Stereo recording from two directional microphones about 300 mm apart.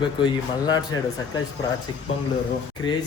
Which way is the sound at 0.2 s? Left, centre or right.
Centre.